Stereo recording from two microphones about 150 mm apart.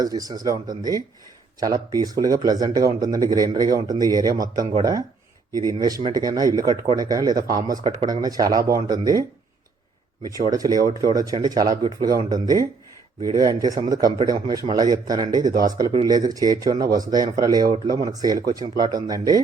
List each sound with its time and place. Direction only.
0.0 s speech: 25° right (ahead or behind)
10.3 s speech: 25° right (ahead or behind)